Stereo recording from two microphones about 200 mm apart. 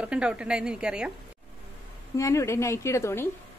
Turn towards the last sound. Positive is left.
turn(degrees=15)  # may be behind; listen again after turning